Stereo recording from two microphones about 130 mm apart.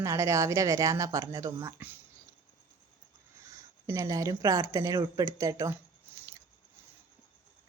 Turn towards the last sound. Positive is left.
turn(degrees=-25)  # may be behind; listen again after turning